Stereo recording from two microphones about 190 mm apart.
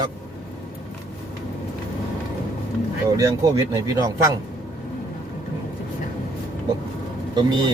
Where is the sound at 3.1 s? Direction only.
15° right (ahead or behind).